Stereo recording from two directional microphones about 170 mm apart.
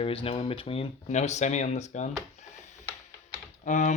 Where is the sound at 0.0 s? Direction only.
35° left (ahead or behind).